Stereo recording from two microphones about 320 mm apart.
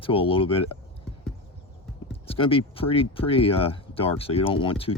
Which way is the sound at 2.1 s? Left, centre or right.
Centre.